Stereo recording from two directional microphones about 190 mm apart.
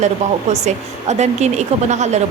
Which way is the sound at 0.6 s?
35° right (ahead or behind).